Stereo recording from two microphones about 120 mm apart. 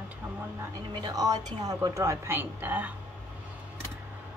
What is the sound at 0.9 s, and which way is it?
A woman's voice, 35° right (ahead or behind).